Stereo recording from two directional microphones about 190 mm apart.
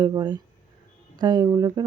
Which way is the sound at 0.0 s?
20° right (ahead or behind).